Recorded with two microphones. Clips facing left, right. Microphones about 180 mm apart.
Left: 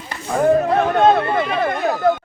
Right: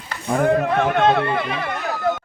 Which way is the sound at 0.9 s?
45° left (ahead or behind).